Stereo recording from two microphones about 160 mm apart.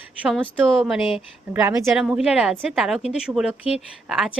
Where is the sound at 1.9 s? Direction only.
5° right (ahead or behind).